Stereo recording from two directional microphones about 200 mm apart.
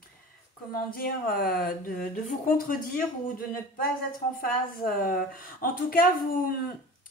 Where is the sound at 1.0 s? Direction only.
45° left (ahead or behind).